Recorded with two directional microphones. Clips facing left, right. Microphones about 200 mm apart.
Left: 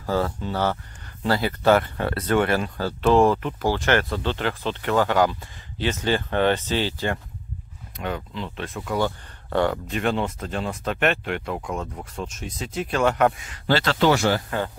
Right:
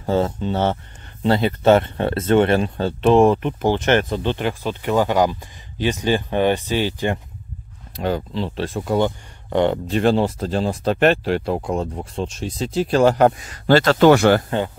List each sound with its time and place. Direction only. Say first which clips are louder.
0.0 s speech: right 4 dB; 25° right (ahead or behind)
7.9 s speech: right 7 dB; 35° right (ahead or behind)
9.0 s speech: right 4 dB; 20° right (ahead or behind)
9.8 s speech: right 7 dB; 35° right (ahead or behind); by 14.4 s 60° right (ahead or behind)